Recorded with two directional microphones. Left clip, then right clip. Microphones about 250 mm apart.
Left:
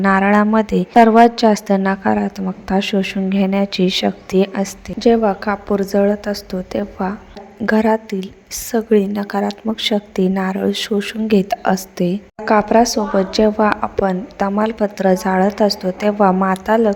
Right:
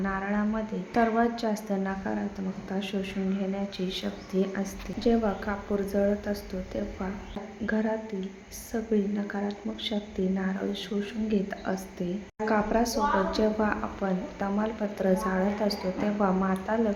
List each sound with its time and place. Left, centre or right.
0.0 s a woman's voice: left